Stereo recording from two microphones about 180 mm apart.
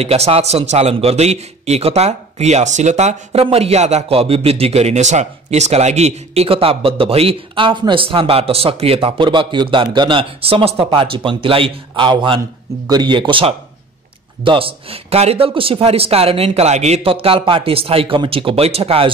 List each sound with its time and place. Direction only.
0.0 s a man's voice: 35° right (ahead or behind)